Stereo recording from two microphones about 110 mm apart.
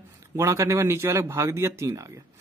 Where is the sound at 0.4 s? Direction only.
25° right (ahead or behind).